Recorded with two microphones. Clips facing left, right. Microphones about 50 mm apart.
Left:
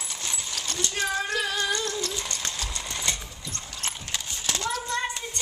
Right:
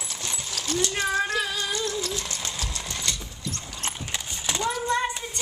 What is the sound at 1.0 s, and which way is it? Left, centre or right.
Music, centre.